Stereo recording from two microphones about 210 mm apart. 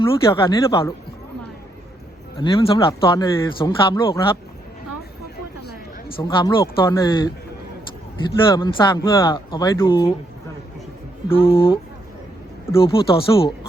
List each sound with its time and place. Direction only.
0.0 s speech: 25° left (ahead or behind)
2.4 s speech: 20° left (ahead or behind)
6.2 s speech: 20° left (ahead or behind)
8.4 s speech: 20° left (ahead or behind)
11.3 s speech: 25° left (ahead or behind)